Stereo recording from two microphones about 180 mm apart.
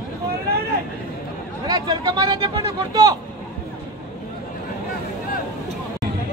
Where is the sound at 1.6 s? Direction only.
20° right (ahead or behind).